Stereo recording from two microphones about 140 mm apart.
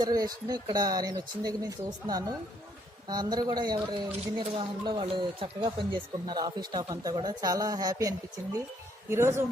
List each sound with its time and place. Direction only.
0.0 s speech: 25° right (ahead or behind)